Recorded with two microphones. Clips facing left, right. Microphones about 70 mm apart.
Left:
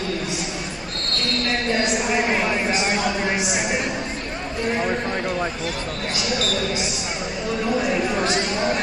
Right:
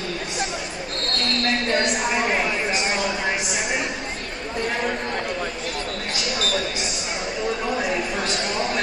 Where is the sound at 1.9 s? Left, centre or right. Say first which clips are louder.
Left 1 dB; centre.